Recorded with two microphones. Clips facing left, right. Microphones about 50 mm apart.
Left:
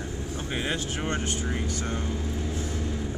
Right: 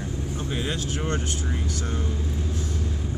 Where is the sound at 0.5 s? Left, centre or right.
Left.